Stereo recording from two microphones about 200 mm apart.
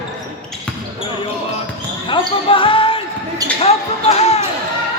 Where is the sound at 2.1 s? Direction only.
25° left (ahead or behind).